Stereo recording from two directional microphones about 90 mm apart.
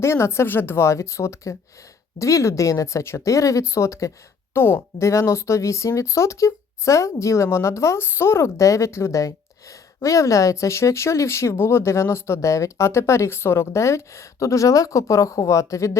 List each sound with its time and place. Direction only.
0.0 s speech: 30° left (ahead or behind)